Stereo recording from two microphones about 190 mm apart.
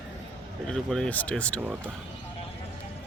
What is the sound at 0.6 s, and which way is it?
Speech, 5° left (ahead or behind).